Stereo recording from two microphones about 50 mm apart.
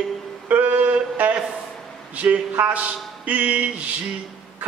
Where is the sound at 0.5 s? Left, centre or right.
Right.